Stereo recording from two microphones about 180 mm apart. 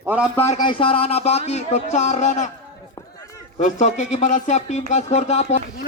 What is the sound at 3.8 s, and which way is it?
Speech, 40° left (ahead or behind).